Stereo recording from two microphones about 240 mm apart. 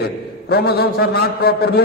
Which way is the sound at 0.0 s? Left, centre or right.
Left.